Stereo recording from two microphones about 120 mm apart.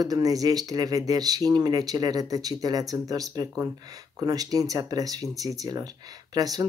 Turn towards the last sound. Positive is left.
turn(degrees=-35)  # may be behind; listen again after turning